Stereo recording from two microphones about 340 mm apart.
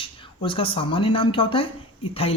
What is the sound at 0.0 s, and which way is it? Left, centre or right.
Speech, centre.